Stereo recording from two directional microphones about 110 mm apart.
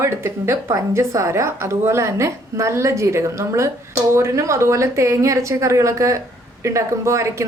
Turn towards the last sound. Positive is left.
turn(degrees=-25)  # may be behind; listen again after turning